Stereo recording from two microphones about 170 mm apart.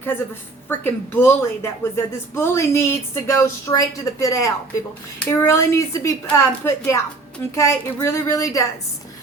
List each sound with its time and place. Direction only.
0.7 s speech: 10° left (ahead or behind)